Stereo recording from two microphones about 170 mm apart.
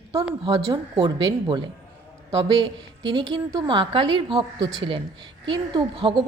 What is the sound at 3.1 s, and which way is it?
A woman's voice, 25° right (ahead or behind).